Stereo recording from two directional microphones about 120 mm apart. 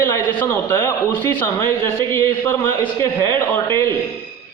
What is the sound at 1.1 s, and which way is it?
Speech, 15° left (ahead or behind).